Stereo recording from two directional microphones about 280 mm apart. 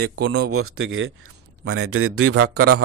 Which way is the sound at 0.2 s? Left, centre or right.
Right.